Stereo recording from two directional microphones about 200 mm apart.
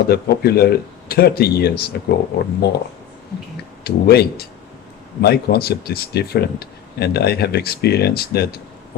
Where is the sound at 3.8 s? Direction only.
50° left (ahead or behind).